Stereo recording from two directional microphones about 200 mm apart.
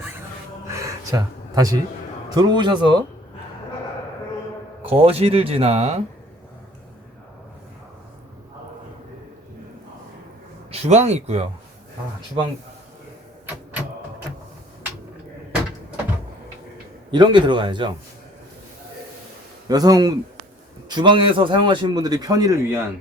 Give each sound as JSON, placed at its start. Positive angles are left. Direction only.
{"t": 0.7, "sound": "a sound", "side_deg": -15}
{"t": 2.3, "sound": "a man's voice", "side_deg": -20}
{"t": 4.9, "sound": "a man's voice", "side_deg": -30}
{"t": 10.7, "sound": "speech", "side_deg": -35}
{"t": 17.1, "sound": "a man's voice", "side_deg": -25}
{"t": 19.6, "sound": "a man's voice", "side_deg": -20}